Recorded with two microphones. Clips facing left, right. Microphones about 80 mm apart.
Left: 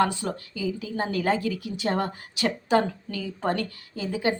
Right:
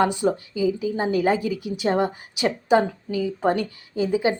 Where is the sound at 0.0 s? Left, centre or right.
Centre.